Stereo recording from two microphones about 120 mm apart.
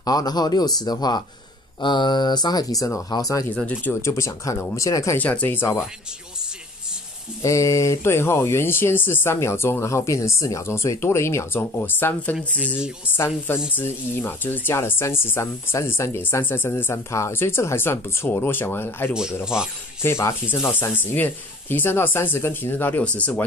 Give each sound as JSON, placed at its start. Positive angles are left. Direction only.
{"t": 0.0, "sound": "speech", "side_deg": 35}
{"t": 3.5, "sound": "speech", "side_deg": 10}
{"t": 4.0, "sound": "speech", "side_deg": 25}
{"t": 5.1, "sound": "speech", "side_deg": 15}
{"t": 7.4, "sound": "speech", "side_deg": 25}
{"t": 12.7, "sound": "speech", "side_deg": -5}
{"t": 13.7, "sound": "speech", "side_deg": 15}
{"t": 19.4, "sound": "speech", "side_deg": -5}
{"t": 20.0, "sound": "speech", "side_deg": 20}